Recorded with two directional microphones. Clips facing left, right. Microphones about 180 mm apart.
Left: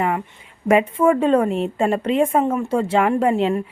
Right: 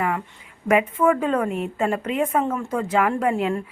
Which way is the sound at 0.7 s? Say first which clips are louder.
Left 3 dB; 30° left (ahead or behind).